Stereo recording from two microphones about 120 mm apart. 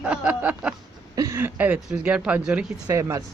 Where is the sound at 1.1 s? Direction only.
25° right (ahead or behind); by 2.7 s 10° right (ahead or behind).